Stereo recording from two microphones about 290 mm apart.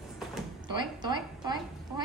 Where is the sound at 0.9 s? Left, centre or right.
Centre.